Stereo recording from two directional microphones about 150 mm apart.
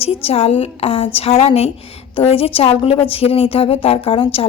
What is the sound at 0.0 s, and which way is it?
A woman's voice, 40° left (ahead or behind).